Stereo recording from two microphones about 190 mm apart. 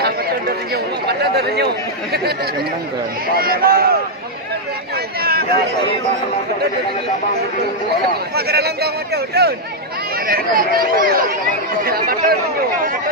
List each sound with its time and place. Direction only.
1.0 s chatter: 60° right (ahead or behind)
3.3 s speech: 50° right (ahead or behind)
5.2 s a sound: 55° right (ahead or behind)
8.4 s speech: 60° right (ahead or behind)